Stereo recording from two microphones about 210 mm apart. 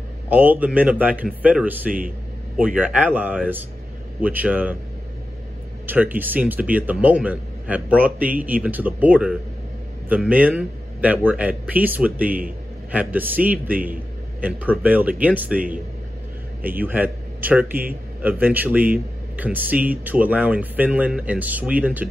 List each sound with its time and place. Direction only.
0.3 s speech: 10° right (ahead or behind)
1.9 s speech: 40° right (ahead or behind)
2.5 s speech: 5° right (ahead or behind)
5.9 s speech: 10° right (ahead or behind)
16.8 s a man's voice: 10° right (ahead or behind)